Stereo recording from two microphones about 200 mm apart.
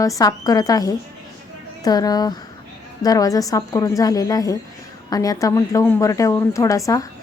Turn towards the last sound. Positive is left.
turn(degrees=15)  # may be behind; listen again after turning